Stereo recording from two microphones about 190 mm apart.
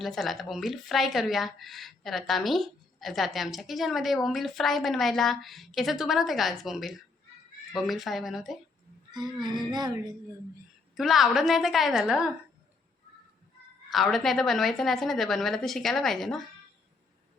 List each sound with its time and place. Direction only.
0.0 s a woman's voice: centre (ahead or behind)
9.1 s speech: 20° right (ahead or behind)
10.9 s a woman's voice: centre (ahead or behind)
13.9 s a woman's voice: centre (ahead or behind)